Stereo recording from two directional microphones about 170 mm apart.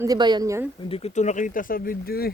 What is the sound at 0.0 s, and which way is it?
Speech, 25° right (ahead or behind).